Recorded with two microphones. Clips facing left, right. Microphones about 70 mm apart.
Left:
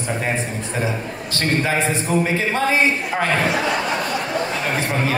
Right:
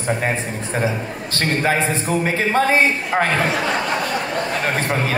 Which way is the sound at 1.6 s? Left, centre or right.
Right.